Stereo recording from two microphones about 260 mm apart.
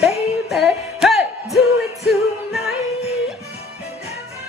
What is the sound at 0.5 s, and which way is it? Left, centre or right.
Music, centre.